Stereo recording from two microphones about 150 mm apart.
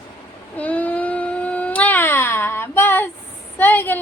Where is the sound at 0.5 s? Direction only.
10° left (ahead or behind).